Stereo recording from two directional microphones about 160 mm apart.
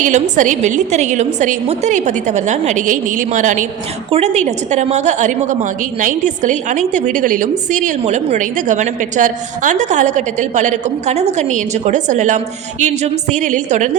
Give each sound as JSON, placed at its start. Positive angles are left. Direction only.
{"t": 0.0, "sound": "a woman's voice", "side_deg": -55}